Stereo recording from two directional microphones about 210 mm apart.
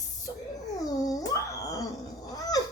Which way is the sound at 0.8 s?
15° left (ahead or behind).